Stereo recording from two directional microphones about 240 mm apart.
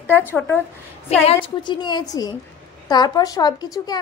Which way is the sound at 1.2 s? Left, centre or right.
Left.